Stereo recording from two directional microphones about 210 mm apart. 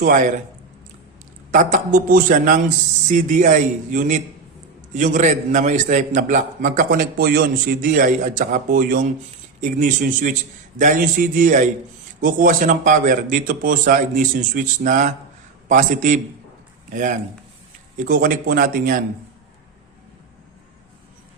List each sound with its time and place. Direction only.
1.5 s a man's voice: 35° right (ahead or behind)